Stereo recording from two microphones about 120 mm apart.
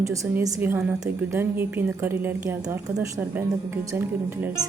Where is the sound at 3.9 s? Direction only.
15° right (ahead or behind).